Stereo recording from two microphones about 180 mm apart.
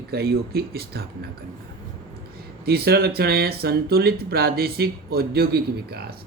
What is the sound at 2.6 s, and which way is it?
Speech, 60° right (ahead or behind).